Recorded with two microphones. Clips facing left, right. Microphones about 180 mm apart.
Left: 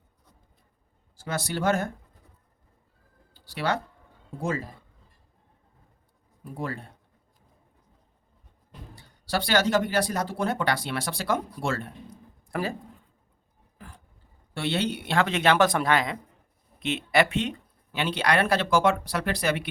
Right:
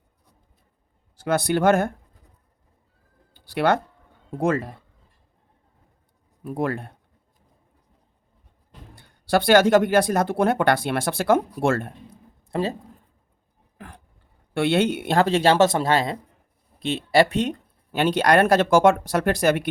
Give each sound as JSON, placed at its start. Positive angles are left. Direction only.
{"t": 1.2, "sound": "speech", "side_deg": -55}
{"t": 3.3, "sound": "a sound", "side_deg": -55}
{"t": 4.3, "sound": "speech", "side_deg": -65}
{"t": 6.4, "sound": "speech", "side_deg": -65}
{"t": 9.0, "sound": "speech", "side_deg": -55}
{"t": 12.5, "sound": "speech", "side_deg": -25}
{"t": 13.7, "sound": "vehicle", "side_deg": -65}
{"t": 14.5, "sound": "speech", "side_deg": -55}